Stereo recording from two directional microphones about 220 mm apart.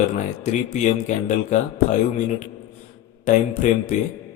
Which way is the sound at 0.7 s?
35° left (ahead or behind).